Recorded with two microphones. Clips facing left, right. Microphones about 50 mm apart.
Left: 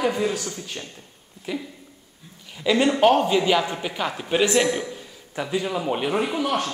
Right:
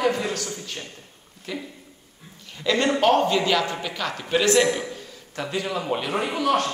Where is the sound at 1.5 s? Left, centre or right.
Centre.